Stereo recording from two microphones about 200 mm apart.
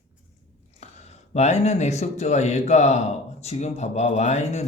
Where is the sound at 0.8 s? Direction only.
35° left (ahead or behind).